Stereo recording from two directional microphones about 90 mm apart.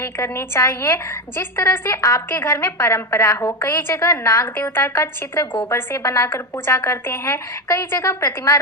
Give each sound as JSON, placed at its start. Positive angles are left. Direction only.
{"t": 0.0, "sound": "a woman's voice", "side_deg": 30}